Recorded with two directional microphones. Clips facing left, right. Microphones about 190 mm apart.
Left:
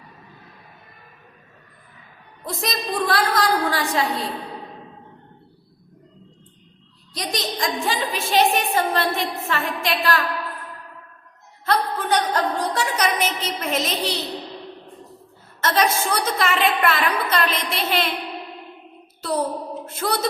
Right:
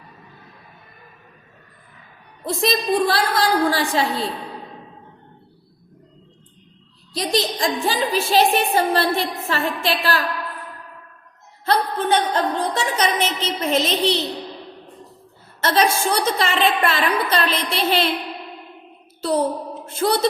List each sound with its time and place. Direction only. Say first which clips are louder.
2.4 s a woman's voice: right 6 dB; 30° right (ahead or behind)
7.1 s a woman's voice: right 6 dB; 30° right (ahead or behind)
11.6 s a woman's voice: right 2 dB; 30° right (ahead or behind)
15.6 s a woman's voice: right 2 dB; 30° right (ahead or behind)
19.8 s a woman's voice: right 6 dB; 30° right (ahead or behind)